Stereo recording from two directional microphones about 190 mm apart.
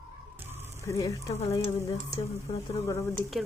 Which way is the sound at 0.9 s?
20° left (ahead or behind).